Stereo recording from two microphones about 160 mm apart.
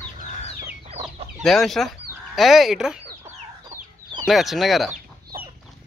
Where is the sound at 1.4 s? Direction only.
Centre (ahead or behind).